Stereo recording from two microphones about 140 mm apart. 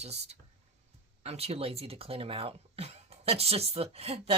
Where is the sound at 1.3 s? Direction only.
45° right (ahead or behind).